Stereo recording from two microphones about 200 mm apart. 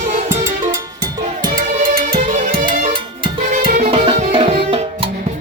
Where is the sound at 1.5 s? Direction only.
45° right (ahead or behind).